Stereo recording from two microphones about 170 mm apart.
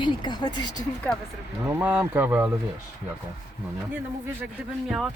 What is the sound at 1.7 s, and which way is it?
Speech, 10° right (ahead or behind).